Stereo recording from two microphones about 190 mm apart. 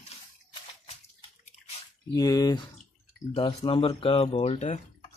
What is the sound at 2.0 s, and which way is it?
Speech, 20° left (ahead or behind).